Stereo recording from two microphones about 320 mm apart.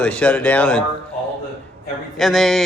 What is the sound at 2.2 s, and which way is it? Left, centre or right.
Speech, centre.